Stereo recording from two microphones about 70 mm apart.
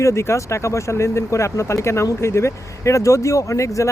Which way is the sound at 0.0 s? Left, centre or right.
Left.